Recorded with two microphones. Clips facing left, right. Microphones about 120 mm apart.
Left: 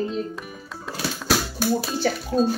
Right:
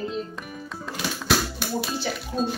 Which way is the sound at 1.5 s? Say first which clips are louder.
Left 5 dB; 40° left (ahead or behind).